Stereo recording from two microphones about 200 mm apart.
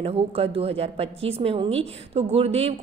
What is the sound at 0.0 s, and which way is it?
A woman's voice, 30° right (ahead or behind).